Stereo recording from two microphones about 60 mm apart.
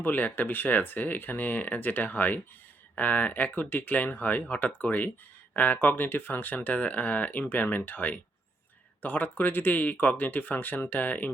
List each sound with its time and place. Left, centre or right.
0.0 s speech: left